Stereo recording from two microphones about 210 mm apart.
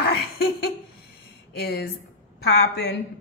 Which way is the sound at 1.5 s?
50° left (ahead or behind).